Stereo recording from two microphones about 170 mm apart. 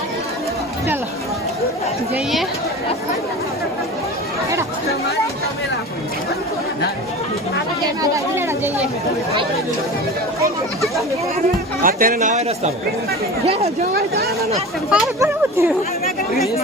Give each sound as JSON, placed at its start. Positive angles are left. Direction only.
{"t": 8.1, "sound": "speech", "side_deg": -15}
{"t": 11.8, "sound": "speech", "side_deg": -55}
{"t": 14.8, "sound": "speech", "side_deg": -5}
{"t": 15.2, "sound": "speech", "side_deg": -15}